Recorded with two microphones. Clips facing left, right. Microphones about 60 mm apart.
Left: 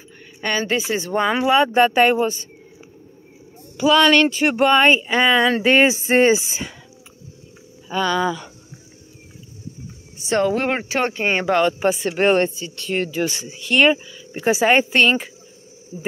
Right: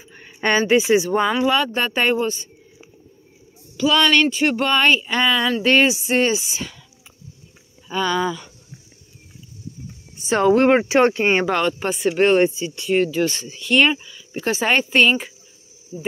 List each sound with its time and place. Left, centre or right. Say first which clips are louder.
0.2 s a sound: right 4 dB; right
0.7 s speech: right 6 dB; right
0.9 s speech: right 3 dB; centre
1.4 s speech: left 4 dB; centre
3.8 s speech: left 2 dB; centre
5.9 s speech: left 2 dB; left
6.1 s speech: left 4 dB; left
7.9 s speech: left 1 dB; centre
10.1 s speech: right 3 dB; centre
11.5 s speech: left 3 dB; centre
12.4 s speech: right 2 dB; centre
12.8 s speech: right 3 dB; centre
14.9 s speech: even; centre
15.9 s speech: right 1 dB; left